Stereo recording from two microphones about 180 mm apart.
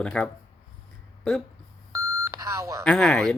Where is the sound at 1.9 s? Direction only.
20° right (ahead or behind).